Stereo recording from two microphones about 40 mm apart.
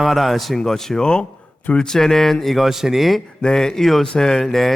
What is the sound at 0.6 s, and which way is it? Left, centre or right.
Speech, centre.